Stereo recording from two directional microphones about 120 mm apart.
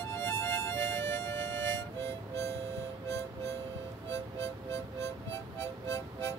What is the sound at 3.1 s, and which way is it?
Music, 20° left (ahead or behind).